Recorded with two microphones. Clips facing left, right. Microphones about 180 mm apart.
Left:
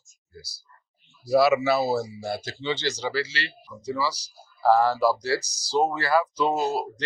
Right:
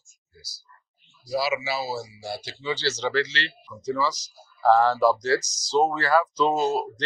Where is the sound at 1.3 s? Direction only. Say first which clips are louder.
Left 7 dB; 60° left (ahead or behind).